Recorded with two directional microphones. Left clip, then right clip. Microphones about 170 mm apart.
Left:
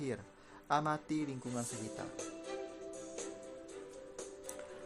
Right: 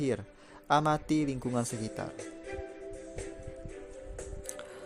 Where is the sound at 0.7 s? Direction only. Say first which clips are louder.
Right 7 dB; 40° right (ahead or behind).